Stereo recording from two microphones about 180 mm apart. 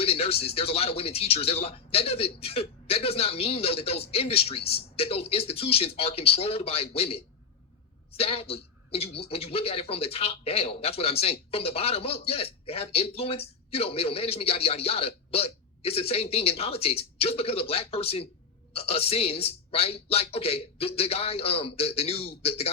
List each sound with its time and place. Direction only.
0.0 s speech: 35° left (ahead or behind)